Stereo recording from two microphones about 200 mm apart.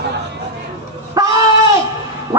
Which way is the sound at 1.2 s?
20° right (ahead or behind).